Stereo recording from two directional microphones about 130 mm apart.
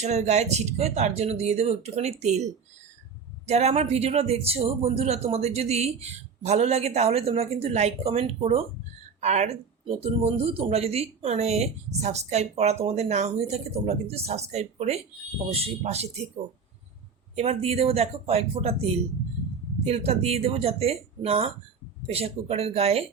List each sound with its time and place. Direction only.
0.0 s speech: 60° right (ahead or behind)
17.3 s speech: 55° right (ahead or behind)